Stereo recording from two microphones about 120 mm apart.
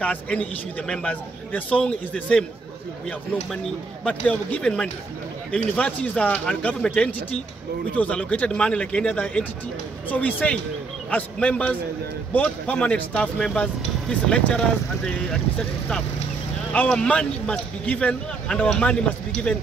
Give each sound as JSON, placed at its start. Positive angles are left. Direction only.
{"t": 0.0, "sound": "a man's voice", "side_deg": 10}
{"t": 4.0, "sound": "a man's voice", "side_deg": 10}
{"t": 16.7, "sound": "a man's voice", "side_deg": 10}